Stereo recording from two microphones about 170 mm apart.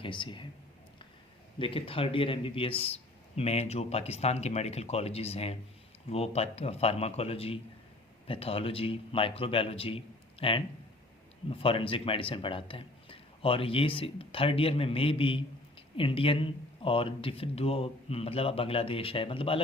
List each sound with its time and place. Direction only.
0.0 s speech: 30° left (ahead or behind)
1.5 s a man's voice: 30° left (ahead or behind)